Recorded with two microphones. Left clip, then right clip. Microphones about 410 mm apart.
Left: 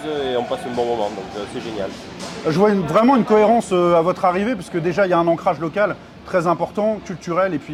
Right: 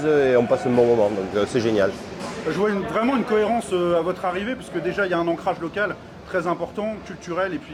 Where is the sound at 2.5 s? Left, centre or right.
Left.